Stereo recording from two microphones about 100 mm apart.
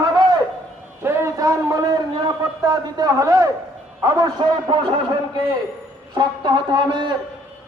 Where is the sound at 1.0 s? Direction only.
25° right (ahead or behind).